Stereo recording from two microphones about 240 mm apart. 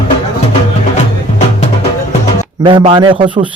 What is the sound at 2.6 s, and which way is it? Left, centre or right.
Speech, right.